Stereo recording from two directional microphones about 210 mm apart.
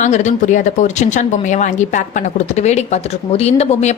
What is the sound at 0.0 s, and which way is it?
A woman's voice, 35° left (ahead or behind).